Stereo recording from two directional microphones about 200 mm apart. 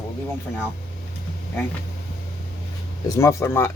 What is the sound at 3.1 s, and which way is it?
Speech, 15° left (ahead or behind).